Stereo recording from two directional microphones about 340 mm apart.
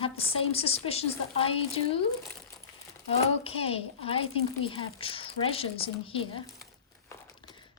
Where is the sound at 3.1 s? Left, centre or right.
Centre.